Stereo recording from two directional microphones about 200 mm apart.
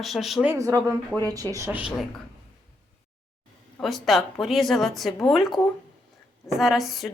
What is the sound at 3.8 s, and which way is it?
Speech, centre (ahead or behind).